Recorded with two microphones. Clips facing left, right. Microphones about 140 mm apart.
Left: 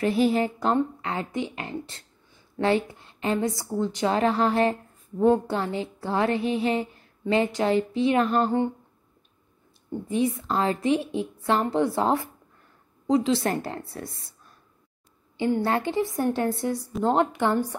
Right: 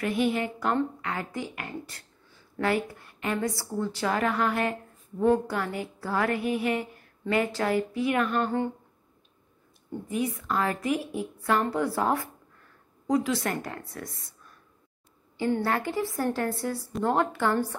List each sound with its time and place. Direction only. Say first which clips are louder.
0.0 s a woman's voice: left 4 dB; 30° left (ahead or behind)
9.8 s a woman's voice: left 5 dB; 25° left (ahead or behind)
15.3 s a woman's voice: left 3 dB; 20° left (ahead or behind)